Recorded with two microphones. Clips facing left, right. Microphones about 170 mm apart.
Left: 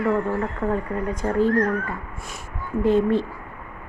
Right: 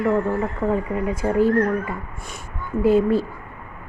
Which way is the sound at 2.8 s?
5° right (ahead or behind).